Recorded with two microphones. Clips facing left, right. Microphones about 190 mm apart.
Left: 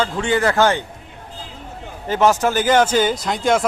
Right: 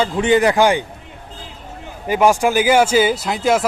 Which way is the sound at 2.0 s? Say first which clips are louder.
Right 2 dB; 10° right (ahead or behind).